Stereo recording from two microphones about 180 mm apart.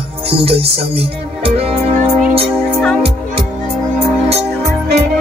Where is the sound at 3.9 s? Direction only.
35° right (ahead or behind).